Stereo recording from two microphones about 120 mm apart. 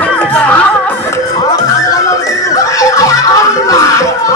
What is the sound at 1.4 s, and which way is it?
Music, 30° left (ahead or behind).